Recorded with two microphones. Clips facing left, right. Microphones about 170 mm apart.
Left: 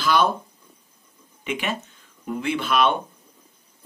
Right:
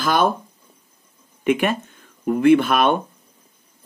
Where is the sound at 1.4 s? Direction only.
50° right (ahead or behind).